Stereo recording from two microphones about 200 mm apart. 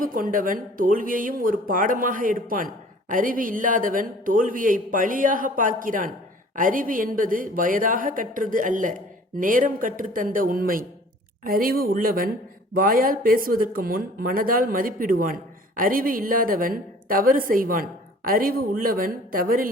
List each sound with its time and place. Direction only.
0.0 s speech: 45° right (ahead or behind)